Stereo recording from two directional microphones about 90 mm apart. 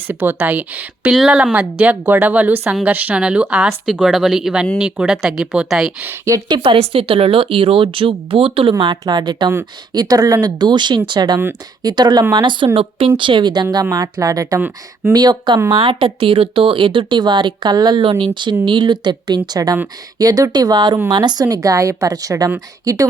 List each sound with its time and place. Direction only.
0.1 s speech: 20° right (ahead or behind)
1.1 s speech: 5° right (ahead or behind)
6.5 s speech: 80° right
8.7 s a woman's voice: 55° right (ahead or behind)
15.7 s speech: 65° right (ahead or behind)
21.4 s a woman's voice: 40° right (ahead or behind)